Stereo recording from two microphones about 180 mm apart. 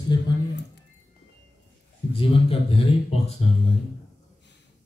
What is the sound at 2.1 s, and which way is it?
Speech, 30° left (ahead or behind).